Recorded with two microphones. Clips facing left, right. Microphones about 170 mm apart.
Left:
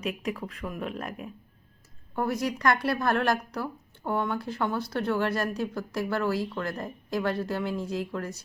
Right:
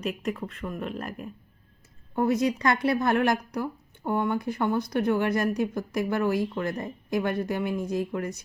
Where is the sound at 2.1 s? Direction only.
20° right (ahead or behind).